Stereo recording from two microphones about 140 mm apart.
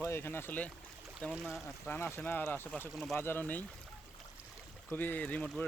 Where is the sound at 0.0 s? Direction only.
15° left (ahead or behind).